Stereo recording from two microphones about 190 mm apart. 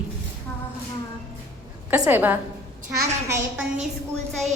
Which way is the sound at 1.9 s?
10° right (ahead or behind).